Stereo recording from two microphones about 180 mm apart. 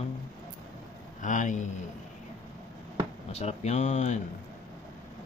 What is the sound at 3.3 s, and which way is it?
Speech, 35° left (ahead or behind).